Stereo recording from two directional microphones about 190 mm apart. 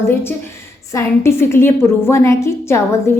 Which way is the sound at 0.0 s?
15° left (ahead or behind).